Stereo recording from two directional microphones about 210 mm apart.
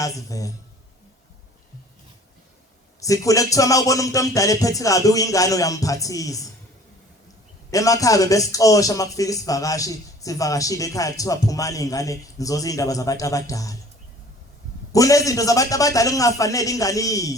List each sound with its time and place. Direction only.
0.0 s a man's voice: 15° left (ahead or behind)
3.0 s a man's voice: 15° left (ahead or behind)
7.7 s a man's voice: 15° left (ahead or behind)
14.9 s a man's voice: 15° left (ahead or behind)